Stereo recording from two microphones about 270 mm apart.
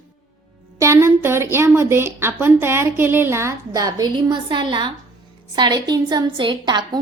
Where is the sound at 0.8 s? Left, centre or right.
Centre.